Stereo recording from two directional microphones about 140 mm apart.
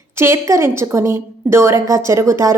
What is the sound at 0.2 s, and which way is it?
A woman's voice, 20° right (ahead or behind).